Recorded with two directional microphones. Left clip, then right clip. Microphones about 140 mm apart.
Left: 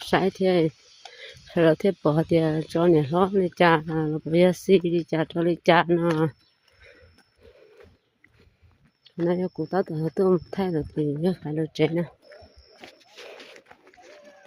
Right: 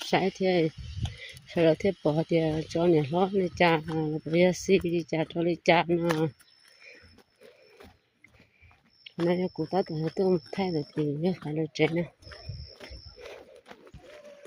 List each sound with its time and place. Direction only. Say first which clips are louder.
0.1 s speech: left 4 dB; 30° left (ahead or behind)
9.2 s speech: left 2 dB; 20° left (ahead or behind)
13.7 s a sound: right 2 dB; 25° right (ahead or behind)